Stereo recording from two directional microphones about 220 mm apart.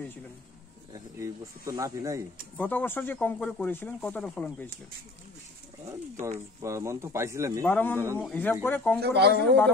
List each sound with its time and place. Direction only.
0.9 s speech: 15° right (ahead or behind)
2.5 s speech: 10° left (ahead or behind)
6.6 s speech: 15° right (ahead or behind)
7.6 s speech: 10° left (ahead or behind)
9.0 s speech: 50° right (ahead or behind)